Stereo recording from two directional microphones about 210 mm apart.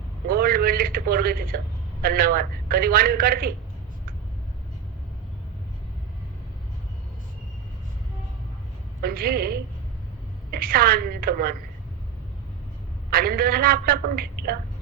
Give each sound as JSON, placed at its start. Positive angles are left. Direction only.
{"t": 0.3, "sound": "a man's voice", "side_deg": -45}
{"t": 9.0, "sound": "a man's voice", "side_deg": -45}
{"t": 13.1, "sound": "a man's voice", "side_deg": -45}